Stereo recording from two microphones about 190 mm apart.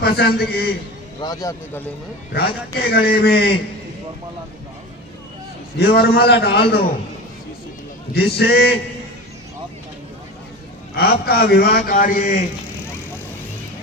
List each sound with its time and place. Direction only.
0.0 s a man's voice: 55° left (ahead or behind)
1.2 s speech: 20° left (ahead or behind)
2.7 s a man's voice: 55° left (ahead or behind)
5.7 s a man's voice: 60° left (ahead or behind)
8.1 s a man's voice: 60° left (ahead or behind)
10.9 s a man's voice: 55° left (ahead or behind)